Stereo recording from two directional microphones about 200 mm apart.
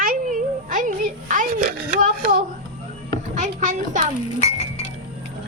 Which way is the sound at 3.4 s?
40° right (ahead or behind).